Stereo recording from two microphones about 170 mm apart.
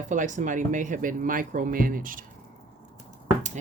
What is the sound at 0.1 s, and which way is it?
Speech, 45° right (ahead or behind).